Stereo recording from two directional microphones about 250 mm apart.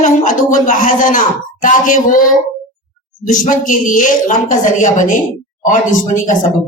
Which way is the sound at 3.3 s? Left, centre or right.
Left.